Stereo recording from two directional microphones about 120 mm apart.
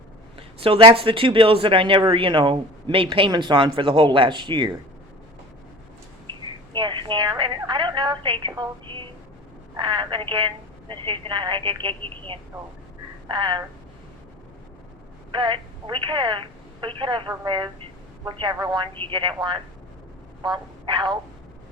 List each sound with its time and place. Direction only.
0.3 s speech: 50° right (ahead or behind)
6.7 s a woman's voice: 40° right (ahead or behind)
15.3 s speech: 45° right (ahead or behind)